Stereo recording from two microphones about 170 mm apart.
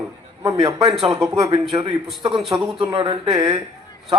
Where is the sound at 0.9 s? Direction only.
Centre (ahead or behind).